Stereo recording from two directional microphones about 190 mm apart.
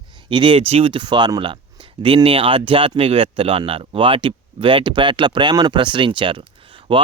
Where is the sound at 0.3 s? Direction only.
25° right (ahead or behind).